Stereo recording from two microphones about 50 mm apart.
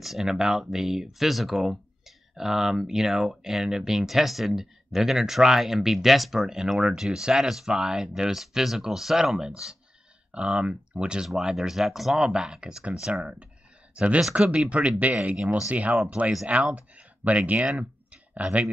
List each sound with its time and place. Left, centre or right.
0.0 s speech: centre
10.3 s speech: right
11.2 s speech: centre; by 17.6 s right
17.7 s clicking: right